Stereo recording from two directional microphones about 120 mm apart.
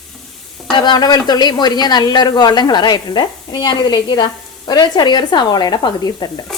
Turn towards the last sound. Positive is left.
turn(degrees=35)  # may be behind; listen again after turning